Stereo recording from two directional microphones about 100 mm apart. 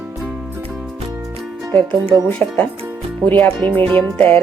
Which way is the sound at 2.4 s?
20° left (ahead or behind).